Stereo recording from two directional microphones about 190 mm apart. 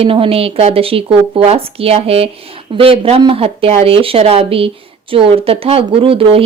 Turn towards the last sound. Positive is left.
turn(degrees=-30)  # may be behind; listen again after turning